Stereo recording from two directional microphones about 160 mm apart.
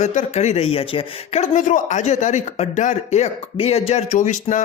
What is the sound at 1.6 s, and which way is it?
Speech, 55° left (ahead or behind).